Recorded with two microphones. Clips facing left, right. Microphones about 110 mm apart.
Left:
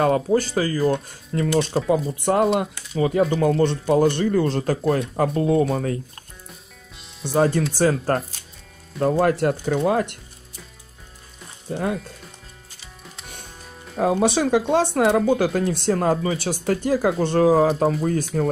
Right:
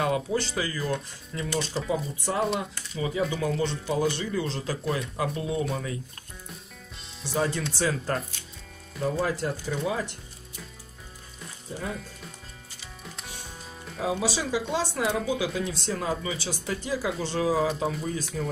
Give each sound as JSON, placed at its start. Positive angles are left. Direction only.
{"t": 0.0, "sound": "speech", "side_deg": 45}
{"t": 1.9, "sound": "speech", "side_deg": 60}
{"t": 7.2, "sound": "speech", "side_deg": 45}
{"t": 9.0, "sound": "speech", "side_deg": 65}
{"t": 11.7, "sound": "speech", "side_deg": 70}
{"t": 13.9, "sound": "speech", "side_deg": 55}
{"t": 18.0, "sound": "speech", "side_deg": 55}